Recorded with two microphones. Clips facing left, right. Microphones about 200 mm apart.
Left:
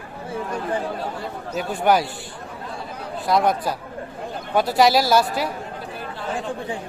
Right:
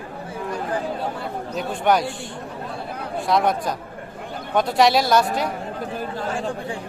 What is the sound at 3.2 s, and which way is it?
Speech, centre (ahead or behind).